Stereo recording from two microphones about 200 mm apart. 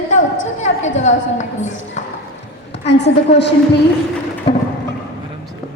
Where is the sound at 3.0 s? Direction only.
60° left (ahead or behind).